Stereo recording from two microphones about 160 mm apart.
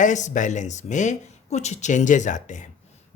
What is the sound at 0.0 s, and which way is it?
Speech, 50° left (ahead or behind).